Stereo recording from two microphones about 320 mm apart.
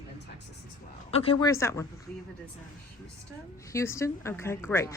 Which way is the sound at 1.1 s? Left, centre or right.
Centre.